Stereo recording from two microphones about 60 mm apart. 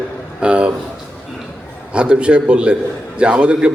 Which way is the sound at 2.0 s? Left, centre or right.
Centre.